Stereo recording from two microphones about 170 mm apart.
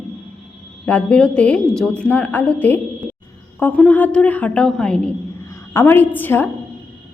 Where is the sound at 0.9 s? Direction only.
5° left (ahead or behind).